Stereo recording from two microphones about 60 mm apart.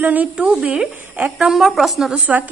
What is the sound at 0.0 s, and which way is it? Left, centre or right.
A woman's voice, right.